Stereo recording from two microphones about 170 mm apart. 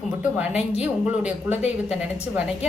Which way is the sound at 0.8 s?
10° right (ahead or behind).